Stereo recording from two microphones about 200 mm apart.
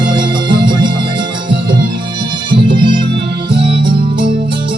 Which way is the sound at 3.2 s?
55° right (ahead or behind).